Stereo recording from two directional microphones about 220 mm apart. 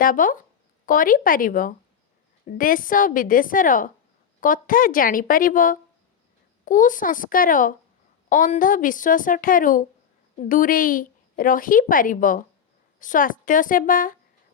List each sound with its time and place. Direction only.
0.0 s a woman's voice: 40° left (ahead or behind)